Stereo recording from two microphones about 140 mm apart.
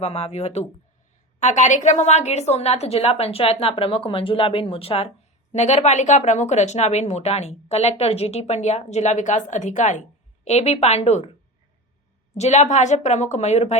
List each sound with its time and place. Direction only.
0.0 s a woman's voice: 50° left (ahead or behind)
12.3 s a woman's voice: 50° left (ahead or behind)